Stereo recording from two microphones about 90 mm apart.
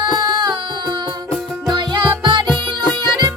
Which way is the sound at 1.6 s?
60° right (ahead or behind).